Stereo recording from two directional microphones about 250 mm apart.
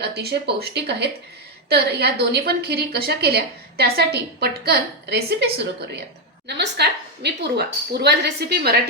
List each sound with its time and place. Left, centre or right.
0.0 s a woman's voice: right